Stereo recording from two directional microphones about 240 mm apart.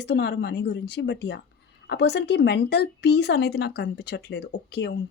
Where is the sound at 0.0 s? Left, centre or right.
Left.